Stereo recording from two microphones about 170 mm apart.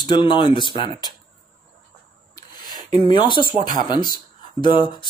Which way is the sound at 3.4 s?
50° right (ahead or behind).